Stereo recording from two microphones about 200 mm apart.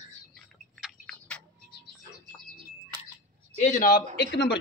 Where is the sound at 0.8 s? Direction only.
5° left (ahead or behind).